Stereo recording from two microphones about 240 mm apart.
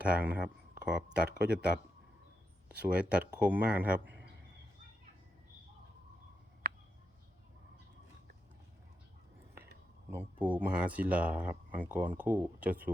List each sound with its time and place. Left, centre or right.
0.2 s speech: centre
6.6 s a sound: right
10.1 s speech: centre